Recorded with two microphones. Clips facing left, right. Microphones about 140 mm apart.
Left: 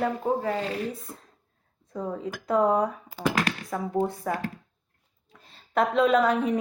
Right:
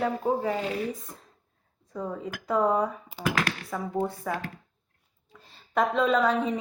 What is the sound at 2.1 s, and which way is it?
Speech, 5° right (ahead or behind).